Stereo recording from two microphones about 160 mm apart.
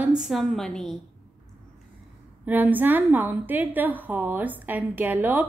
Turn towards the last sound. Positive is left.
turn(degrees=-10)  # may be behind; listen again after turning